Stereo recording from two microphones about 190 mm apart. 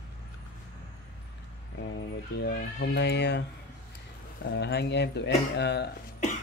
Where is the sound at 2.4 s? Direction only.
65° left (ahead or behind).